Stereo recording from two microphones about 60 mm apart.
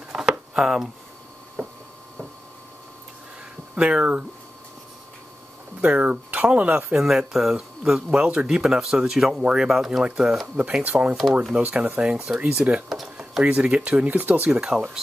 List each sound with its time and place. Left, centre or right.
0.1 s a sound: centre
3.7 s speech: centre
5.8 s speech: right
7.0 s speech: centre
10.8 s speech: right
12.0 s speech: centre
12.9 s a sound: centre
13.4 s speech: right
14.5 s speech: centre